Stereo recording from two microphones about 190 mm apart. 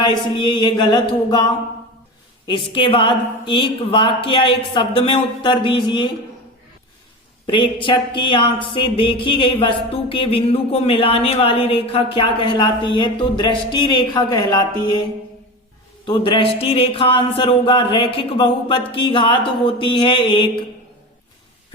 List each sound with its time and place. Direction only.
0.0 s speech: 25° left (ahead or behind)
2.5 s speech: 25° left (ahead or behind)
7.4 s speech: 25° left (ahead or behind)
16.0 s speech: 25° left (ahead or behind)